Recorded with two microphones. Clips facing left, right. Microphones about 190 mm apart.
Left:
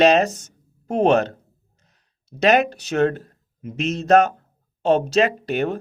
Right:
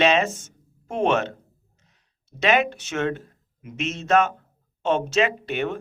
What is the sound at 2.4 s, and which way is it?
Speech, 40° left (ahead or behind).